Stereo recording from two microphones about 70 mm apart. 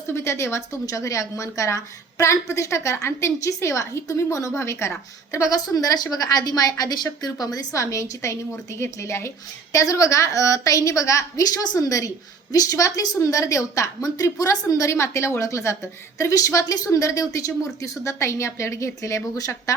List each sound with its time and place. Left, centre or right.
0.1 s speech: left
5.6 s a woman's voice: left